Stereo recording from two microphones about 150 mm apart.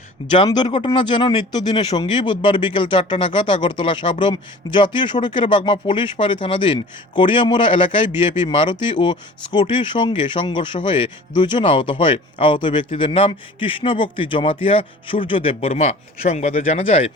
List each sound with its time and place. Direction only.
0.3 s speech: 30° left (ahead or behind)